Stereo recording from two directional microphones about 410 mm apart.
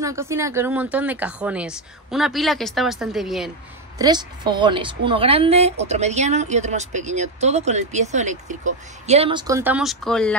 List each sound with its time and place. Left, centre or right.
0.0 s speech: centre